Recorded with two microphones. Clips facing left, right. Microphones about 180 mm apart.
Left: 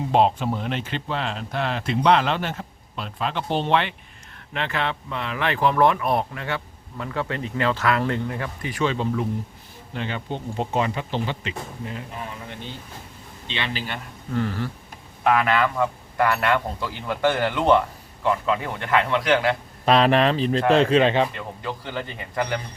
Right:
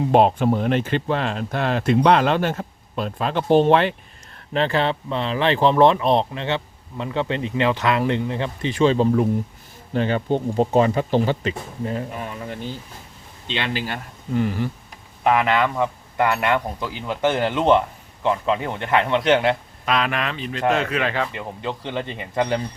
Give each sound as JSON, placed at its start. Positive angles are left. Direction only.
{"t": 0.1, "sound": "speech", "side_deg": -55}
{"t": 9.9, "sound": "speech", "side_deg": -45}
{"t": 14.3, "sound": "speech", "side_deg": -15}
{"t": 19.8, "sound": "speech", "side_deg": 35}
{"t": 21.3, "sound": "speech", "side_deg": -25}